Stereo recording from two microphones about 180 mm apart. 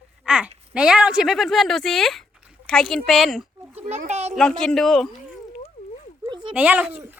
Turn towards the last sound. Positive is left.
turn(degrees=-10)  # may be behind; listen again after turning